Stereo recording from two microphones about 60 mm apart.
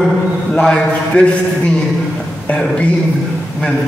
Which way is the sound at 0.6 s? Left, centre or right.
Centre.